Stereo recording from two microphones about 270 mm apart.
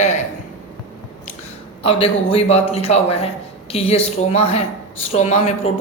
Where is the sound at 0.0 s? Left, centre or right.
Left.